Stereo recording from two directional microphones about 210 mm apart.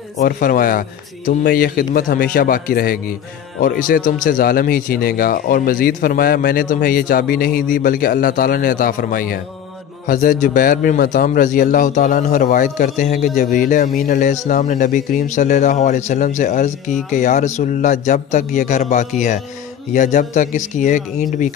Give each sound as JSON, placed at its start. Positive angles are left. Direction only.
{"t": 0.2, "sound": "a man's voice", "side_deg": 40}